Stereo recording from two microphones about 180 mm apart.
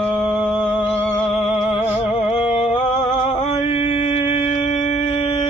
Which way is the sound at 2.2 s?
35° left (ahead or behind).